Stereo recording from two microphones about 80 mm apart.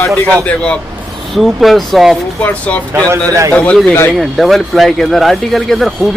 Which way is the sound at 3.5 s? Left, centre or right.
Centre.